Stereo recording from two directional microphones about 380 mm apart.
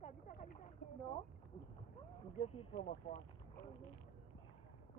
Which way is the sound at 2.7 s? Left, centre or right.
Centre.